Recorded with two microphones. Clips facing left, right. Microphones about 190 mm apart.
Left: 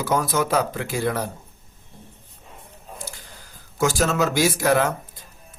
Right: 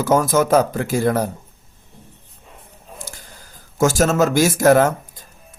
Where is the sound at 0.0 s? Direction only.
45° right (ahead or behind).